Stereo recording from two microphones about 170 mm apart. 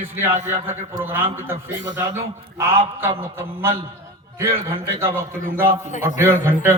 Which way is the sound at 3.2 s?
15° right (ahead or behind).